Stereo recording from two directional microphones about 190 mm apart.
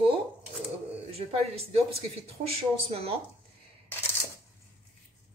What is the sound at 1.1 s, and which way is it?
Speech, 30° right (ahead or behind).